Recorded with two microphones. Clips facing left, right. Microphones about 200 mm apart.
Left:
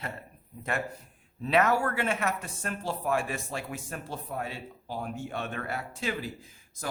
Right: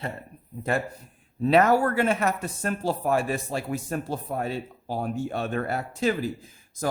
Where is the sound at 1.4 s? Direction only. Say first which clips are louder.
Right 6 dB; 35° right (ahead or behind).